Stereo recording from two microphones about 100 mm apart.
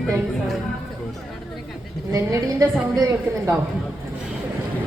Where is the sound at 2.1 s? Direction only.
30° right (ahead or behind).